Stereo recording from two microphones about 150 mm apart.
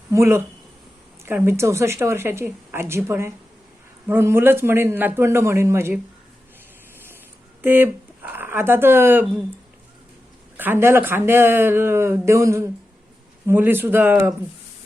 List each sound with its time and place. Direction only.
0.1 s speech: 20° right (ahead or behind)
7.6 s speech: 15° right (ahead or behind)
10.6 s speech: 15° right (ahead or behind)